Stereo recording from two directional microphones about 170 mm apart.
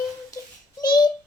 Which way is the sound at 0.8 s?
25° left (ahead or behind).